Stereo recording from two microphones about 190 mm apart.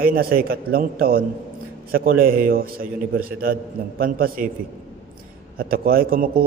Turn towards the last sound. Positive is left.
turn(degrees=-50)  # may be behind; listen again after turning